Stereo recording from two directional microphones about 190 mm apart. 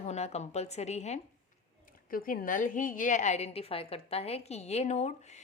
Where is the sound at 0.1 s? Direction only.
35° left (ahead or behind).